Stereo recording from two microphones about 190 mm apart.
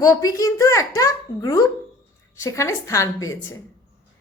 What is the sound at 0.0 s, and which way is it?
A woman's voice, 20° left (ahead or behind).